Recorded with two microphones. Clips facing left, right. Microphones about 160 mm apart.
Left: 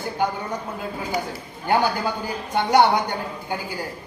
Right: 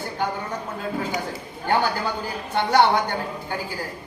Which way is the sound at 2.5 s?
10° left (ahead or behind).